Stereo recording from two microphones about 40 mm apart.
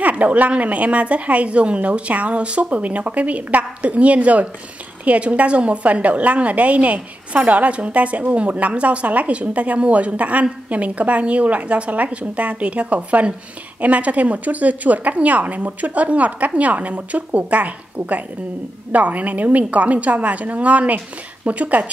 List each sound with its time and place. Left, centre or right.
0.0 s a woman's voice: right